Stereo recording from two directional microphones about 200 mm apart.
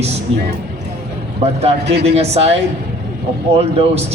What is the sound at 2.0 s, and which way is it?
Speech, 30° right (ahead or behind).